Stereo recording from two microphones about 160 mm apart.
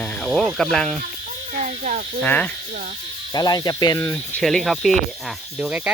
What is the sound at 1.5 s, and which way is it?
Speech, 50° right (ahead or behind).